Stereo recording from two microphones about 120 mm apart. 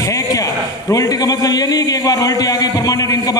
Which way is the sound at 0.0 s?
30° left (ahead or behind).